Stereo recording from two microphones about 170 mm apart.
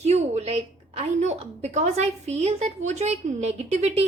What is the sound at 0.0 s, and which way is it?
A woman's voice, 40° right (ahead or behind).